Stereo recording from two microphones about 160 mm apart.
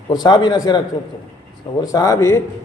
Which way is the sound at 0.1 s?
25° left (ahead or behind).